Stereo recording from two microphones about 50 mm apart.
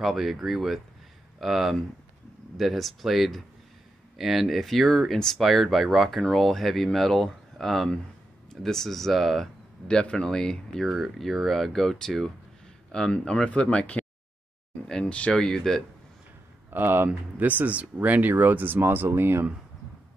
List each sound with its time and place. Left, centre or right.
0.0 s speech: centre
9.8 s speech: centre
10.9 s speech: centre; by 15.3 s left
15.3 s speech: centre
16.7 s speech: right